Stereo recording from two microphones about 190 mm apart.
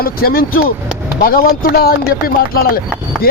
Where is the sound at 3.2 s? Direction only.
50° left (ahead or behind).